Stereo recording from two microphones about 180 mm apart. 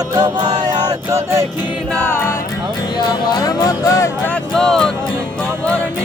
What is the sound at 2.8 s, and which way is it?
Music, 25° left (ahead or behind).